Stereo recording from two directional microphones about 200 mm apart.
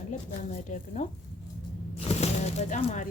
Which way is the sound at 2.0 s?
30° left (ahead or behind).